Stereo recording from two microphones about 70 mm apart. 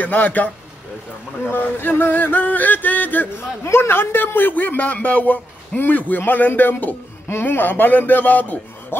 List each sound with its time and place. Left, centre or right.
0.0 s a man's voice: left
1.5 s a man's voice: left
3.6 s a man's voice: left